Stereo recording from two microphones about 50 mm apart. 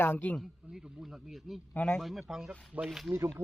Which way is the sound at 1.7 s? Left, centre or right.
Left.